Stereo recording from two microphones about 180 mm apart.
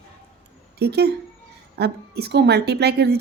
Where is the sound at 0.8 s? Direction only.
65° right (ahead or behind).